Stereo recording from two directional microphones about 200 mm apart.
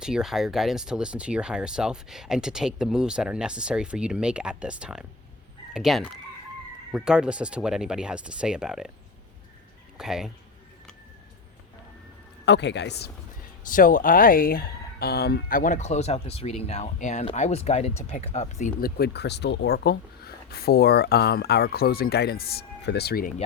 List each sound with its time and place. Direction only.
0.0 s speech: 5° right (ahead or behind)
10.0 s speech: centre (ahead or behind)
12.5 s speech: 60° left (ahead or behind)
13.7 s speech: 40° left (ahead or behind)